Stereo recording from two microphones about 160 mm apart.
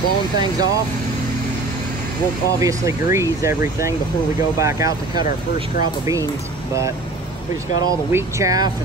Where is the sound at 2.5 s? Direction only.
20° right (ahead or behind).